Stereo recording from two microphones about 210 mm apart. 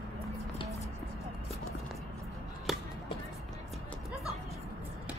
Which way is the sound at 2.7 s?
Centre (ahead or behind).